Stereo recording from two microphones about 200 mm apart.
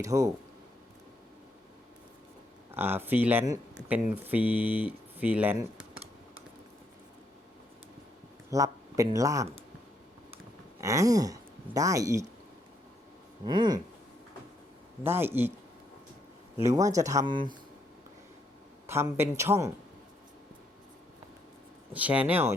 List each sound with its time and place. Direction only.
0.0 s speech: 15° right (ahead or behind)
2.7 s speech: 10° right (ahead or behind)
8.4 s speech: 15° right (ahead or behind)
10.8 s speech: 15° right (ahead or behind)
13.4 s a sound: 20° right (ahead or behind)
15.0 s speech: 10° right (ahead or behind)
16.6 s speech: 15° right (ahead or behind)
18.9 s speech: 10° right (ahead or behind)
21.9 s speech: 5° right (ahead or behind)